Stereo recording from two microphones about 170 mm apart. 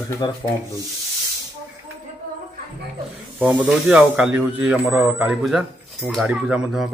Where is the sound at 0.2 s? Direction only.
25° left (ahead or behind).